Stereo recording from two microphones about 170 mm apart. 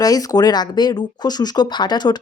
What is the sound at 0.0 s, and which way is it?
Speech, 20° left (ahead or behind).